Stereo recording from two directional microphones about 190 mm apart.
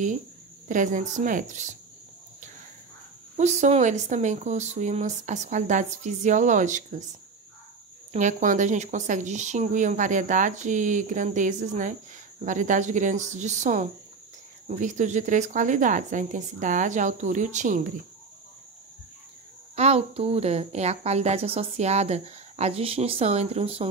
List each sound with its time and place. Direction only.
0.7 s a woman's voice: 40° right (ahead or behind)
3.3 s a woman's voice: 35° right (ahead or behind)
8.1 s a woman's voice: 40° right (ahead or behind)
19.7 s a woman's voice: 35° right (ahead or behind)